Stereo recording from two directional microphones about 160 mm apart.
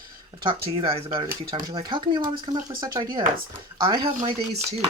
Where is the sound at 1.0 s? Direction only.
30° right (ahead or behind).